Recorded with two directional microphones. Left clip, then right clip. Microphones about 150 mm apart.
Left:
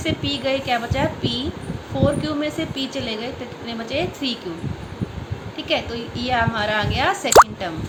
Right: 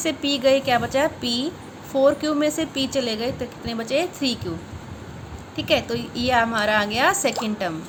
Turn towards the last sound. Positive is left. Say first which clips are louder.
# left 11 dB
turn(degrees=-50)  # may be behind; listen again after turning